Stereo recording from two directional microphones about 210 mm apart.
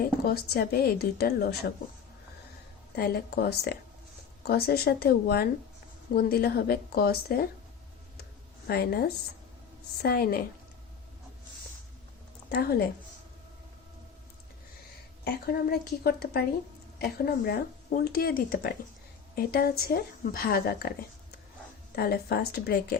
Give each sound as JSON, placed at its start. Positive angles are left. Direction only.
{"t": 0.3, "sound": "speech", "side_deg": 50}
{"t": 2.9, "sound": "speech", "side_deg": 45}
{"t": 8.2, "sound": "a sound", "side_deg": 45}
{"t": 10.0, "sound": "speech", "side_deg": 45}
{"t": 12.5, "sound": "speech", "side_deg": 50}
{"t": 15.2, "sound": "speech", "side_deg": 45}
{"t": 21.9, "sound": "speech", "side_deg": 50}